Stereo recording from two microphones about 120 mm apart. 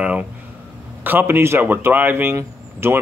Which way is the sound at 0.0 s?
10° right (ahead or behind).